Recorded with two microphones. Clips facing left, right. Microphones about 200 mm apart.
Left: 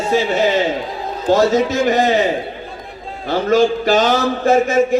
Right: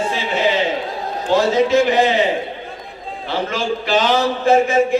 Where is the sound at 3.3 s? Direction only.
45° left (ahead or behind).